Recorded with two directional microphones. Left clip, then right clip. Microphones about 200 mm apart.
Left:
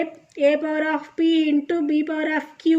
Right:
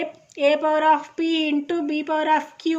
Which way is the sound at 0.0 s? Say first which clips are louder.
Left 1 dB; 40° right (ahead or behind).